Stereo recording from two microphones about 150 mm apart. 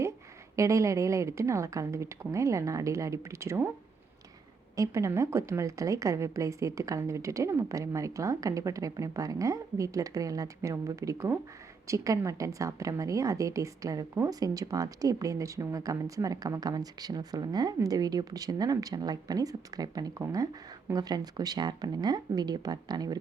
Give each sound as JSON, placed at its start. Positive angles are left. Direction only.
{"t": 0.5, "sound": "a woman's voice", "side_deg": -20}
{"t": 4.8, "sound": "a woman's voice", "side_deg": -20}